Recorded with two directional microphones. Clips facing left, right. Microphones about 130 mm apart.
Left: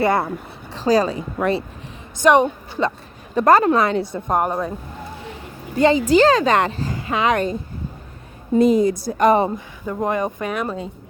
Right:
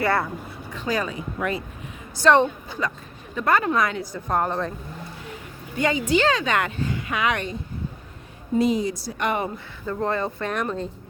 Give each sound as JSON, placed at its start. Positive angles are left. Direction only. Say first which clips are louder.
{"t": 0.0, "sound": "a woman's voice", "louder": "left 4 dB", "side_deg": 25}
{"t": 0.7, "sound": "a woman's voice", "louder": "left 9 dB", "side_deg": 35}
{"t": 2.1, "sound": "speech", "louder": "left 3 dB", "side_deg": 15}
{"t": 3.3, "sound": "a woman's voice", "louder": "left 7 dB", "side_deg": 40}
{"t": 5.7, "sound": "a woman's voice", "louder": "left 7 dB", "side_deg": 35}
{"t": 8.5, "sound": "a woman's voice", "louder": "left 6 dB", "side_deg": 50}
{"t": 9.8, "sound": "speech", "louder": "left 3 dB", "side_deg": 15}